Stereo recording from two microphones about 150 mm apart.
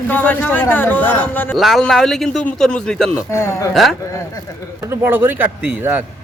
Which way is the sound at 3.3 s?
20° left (ahead or behind).